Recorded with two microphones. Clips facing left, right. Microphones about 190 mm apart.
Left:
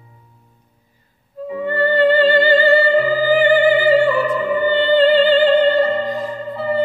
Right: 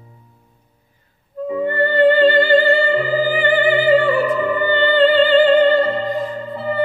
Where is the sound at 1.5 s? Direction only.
55° right (ahead or behind).